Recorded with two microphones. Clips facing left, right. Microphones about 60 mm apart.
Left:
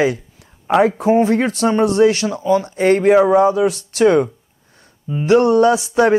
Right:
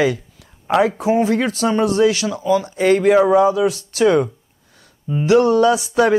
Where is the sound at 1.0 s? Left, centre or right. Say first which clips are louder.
Left 2 dB; left.